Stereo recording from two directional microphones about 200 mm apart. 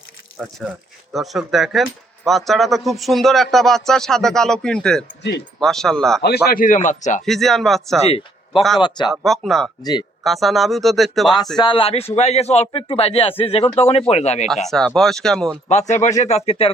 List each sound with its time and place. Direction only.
0.3 s speech: 5° right (ahead or behind)
6.2 s speech: 50° left (ahead or behind)
7.3 s speech: centre (ahead or behind)
8.8 s a man's voice: 20° left (ahead or behind)
9.2 s speech: centre (ahead or behind)
9.8 s a man's voice: 20° left (ahead or behind)
10.2 s speech: centre (ahead or behind)
11.5 s a man's voice: 25° left (ahead or behind)
14.7 s speech: centre (ahead or behind)
15.7 s speech: 35° left (ahead or behind)